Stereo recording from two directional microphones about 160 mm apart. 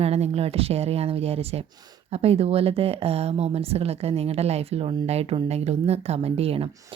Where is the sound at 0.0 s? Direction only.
40° right (ahead or behind).